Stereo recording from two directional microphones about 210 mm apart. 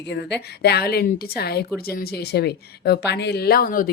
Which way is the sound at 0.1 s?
50° left (ahead or behind).